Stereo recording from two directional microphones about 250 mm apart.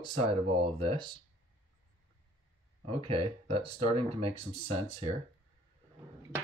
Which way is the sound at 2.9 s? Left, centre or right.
Right.